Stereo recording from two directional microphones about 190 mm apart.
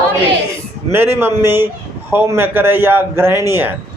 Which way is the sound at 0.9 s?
10° right (ahead or behind).